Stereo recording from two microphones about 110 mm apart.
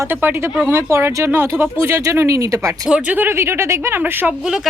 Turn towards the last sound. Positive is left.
turn(degrees=-15)  # may be behind; listen again after turning